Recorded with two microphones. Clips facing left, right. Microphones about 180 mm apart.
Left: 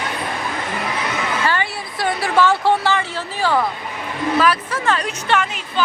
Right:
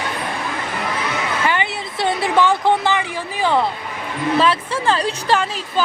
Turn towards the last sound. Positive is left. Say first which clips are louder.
# right 2 dB
turn(degrees=-35)  # may be behind; listen again after turning